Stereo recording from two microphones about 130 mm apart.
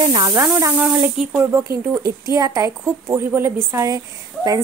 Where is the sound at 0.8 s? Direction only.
5° right (ahead or behind).